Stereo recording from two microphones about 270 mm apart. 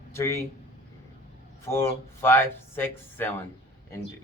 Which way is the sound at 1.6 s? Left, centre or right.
Centre.